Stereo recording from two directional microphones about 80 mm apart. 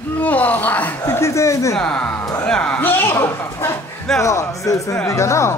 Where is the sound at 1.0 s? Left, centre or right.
Left.